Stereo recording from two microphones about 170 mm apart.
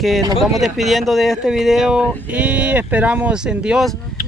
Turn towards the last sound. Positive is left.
turn(degrees=-5)  # may be behind; listen again after turning